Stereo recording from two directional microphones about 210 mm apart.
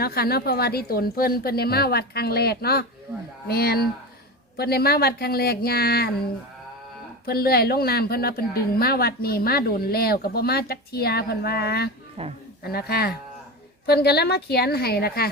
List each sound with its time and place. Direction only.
0.0 s speech: 45° left (ahead or behind)
7.3 s speech: 45° left (ahead or behind)
12.2 s speech: 25° right (ahead or behind)
12.6 s speech: 50° left (ahead or behind)